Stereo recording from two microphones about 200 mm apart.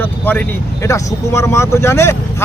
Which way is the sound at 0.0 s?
10° left (ahead or behind).